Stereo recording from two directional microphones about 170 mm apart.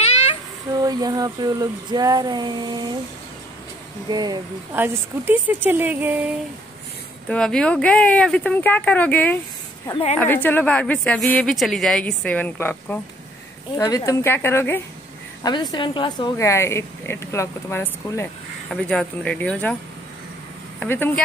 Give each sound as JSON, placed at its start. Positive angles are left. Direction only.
{"t": 0.8, "sound": "a sound", "side_deg": -20}
{"t": 4.1, "sound": "a sound", "side_deg": -25}
{"t": 4.7, "sound": "speech", "side_deg": -10}
{"t": 7.2, "sound": "speech", "side_deg": 5}
{"t": 15.4, "sound": "speech", "side_deg": 25}
{"t": 16.3, "sound": "speech", "side_deg": 15}
{"t": 20.8, "sound": "speech", "side_deg": 10}